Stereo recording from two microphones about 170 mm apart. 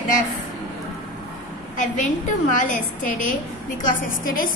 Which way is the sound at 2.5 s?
50° left (ahead or behind).